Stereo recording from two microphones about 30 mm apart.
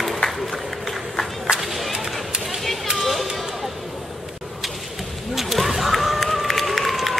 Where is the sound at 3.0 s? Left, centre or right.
Centre.